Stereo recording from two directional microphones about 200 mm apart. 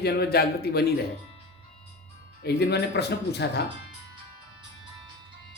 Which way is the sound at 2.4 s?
55° left (ahead or behind).